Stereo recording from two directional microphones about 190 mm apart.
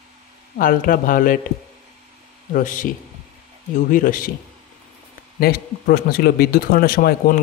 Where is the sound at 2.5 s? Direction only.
45° left (ahead or behind).